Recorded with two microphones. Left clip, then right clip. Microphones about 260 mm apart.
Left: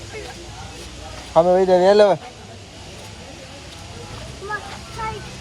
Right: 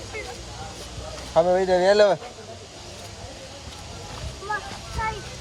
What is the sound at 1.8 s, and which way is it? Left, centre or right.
Speech, centre.